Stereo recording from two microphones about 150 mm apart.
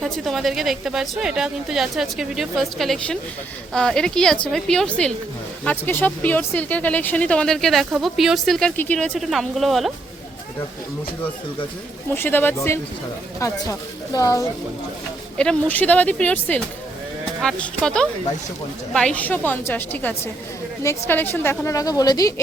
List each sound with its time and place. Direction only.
0.0 s a woman's voice: centre (ahead or behind)
12.1 s a woman's voice: 15° left (ahead or behind)
15.4 s a woman's voice: 10° left (ahead or behind); by 22.3 s 25° left (ahead or behind)